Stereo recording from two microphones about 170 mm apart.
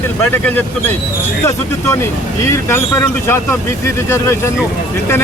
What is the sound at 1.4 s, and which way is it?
Speech, 15° left (ahead or behind).